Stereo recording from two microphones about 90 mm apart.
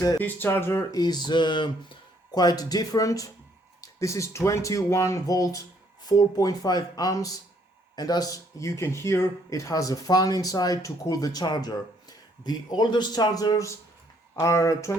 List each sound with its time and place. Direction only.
0.2 s speech: 20° left (ahead or behind); by 14.9 s 35° left (ahead or behind)